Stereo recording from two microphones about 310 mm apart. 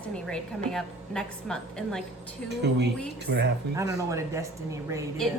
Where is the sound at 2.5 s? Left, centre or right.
Right.